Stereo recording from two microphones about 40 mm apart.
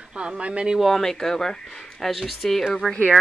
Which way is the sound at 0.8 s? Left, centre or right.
Centre.